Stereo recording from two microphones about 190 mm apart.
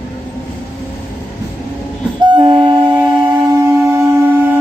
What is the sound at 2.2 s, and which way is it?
Train, 25° right (ahead or behind).